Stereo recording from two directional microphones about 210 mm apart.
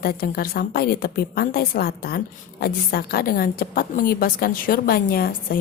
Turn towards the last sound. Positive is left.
turn(degrees=45)  # may be behind; listen again after turning